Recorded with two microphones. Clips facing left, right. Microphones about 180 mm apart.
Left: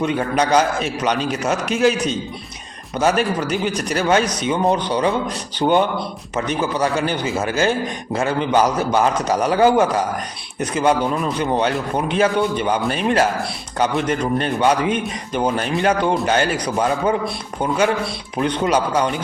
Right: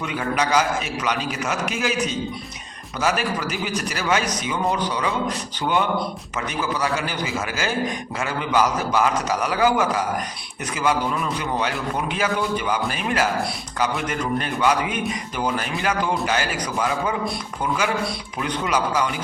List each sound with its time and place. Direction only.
0.0 s a man's voice: 30° left (ahead or behind)
3.0 s a man's voice: 30° left (ahead or behind)